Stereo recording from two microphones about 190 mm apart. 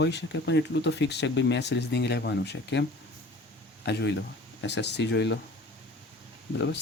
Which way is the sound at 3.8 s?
60° left (ahead or behind).